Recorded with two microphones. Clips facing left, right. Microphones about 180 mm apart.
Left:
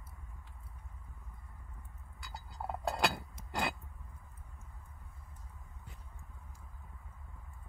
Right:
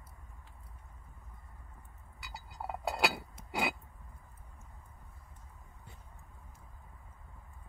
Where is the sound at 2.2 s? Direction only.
5° right (ahead or behind).